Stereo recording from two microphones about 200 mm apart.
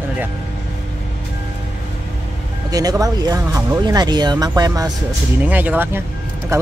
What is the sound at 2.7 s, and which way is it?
Speech, 20° right (ahead or behind).